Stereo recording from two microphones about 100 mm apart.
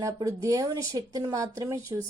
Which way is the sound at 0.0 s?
35° right (ahead or behind).